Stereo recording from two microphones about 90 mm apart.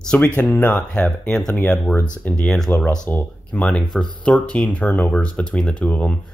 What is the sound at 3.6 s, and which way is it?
Speech, 5° left (ahead or behind).